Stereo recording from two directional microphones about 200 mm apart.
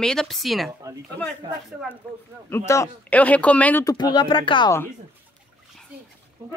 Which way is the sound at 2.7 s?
10° left (ahead or behind).